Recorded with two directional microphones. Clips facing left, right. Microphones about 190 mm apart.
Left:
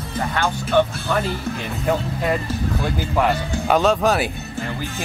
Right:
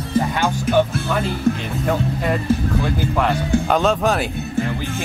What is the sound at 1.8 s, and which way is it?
Speech, 5° left (ahead or behind).